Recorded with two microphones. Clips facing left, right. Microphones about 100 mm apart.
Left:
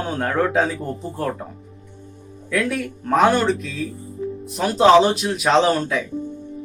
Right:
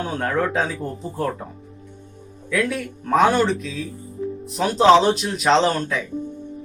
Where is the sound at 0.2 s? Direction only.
Centre (ahead or behind).